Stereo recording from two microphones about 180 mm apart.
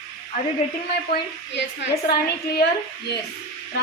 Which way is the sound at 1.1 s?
65° left (ahead or behind).